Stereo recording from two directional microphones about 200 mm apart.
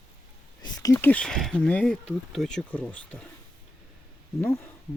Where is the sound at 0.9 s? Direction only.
10° left (ahead or behind).